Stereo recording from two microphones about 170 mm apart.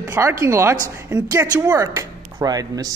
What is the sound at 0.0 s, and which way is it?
Speech, 15° right (ahead or behind).